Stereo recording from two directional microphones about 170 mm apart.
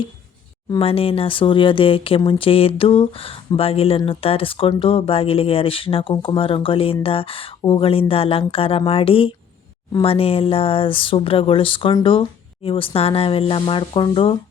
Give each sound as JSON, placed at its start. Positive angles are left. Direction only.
{"t": 0.7, "sound": "speech", "side_deg": 35}